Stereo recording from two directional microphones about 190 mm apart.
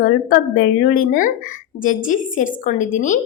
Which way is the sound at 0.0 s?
50° left (ahead or behind).